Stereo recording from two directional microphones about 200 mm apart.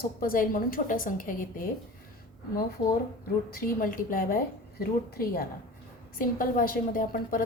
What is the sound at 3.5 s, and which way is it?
Speech, 45° left (ahead or behind).